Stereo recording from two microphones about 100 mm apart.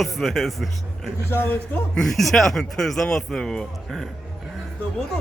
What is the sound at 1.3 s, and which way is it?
Speech, 20° left (ahead or behind).